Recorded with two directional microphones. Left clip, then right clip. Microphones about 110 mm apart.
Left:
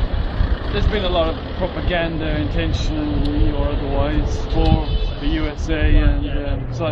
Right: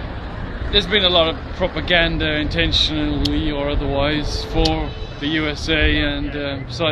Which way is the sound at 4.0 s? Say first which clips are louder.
Right 3 dB; 20° right (ahead or behind).